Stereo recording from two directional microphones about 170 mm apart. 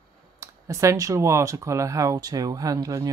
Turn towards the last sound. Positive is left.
turn(degrees=-20)  # may be behind; listen again after turning